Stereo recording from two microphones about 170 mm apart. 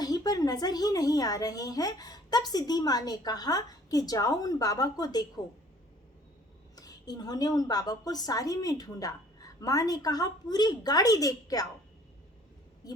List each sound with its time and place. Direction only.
0.0 s a woman's voice: 20° left (ahead or behind)
6.7 s a woman's voice: 25° left (ahead or behind)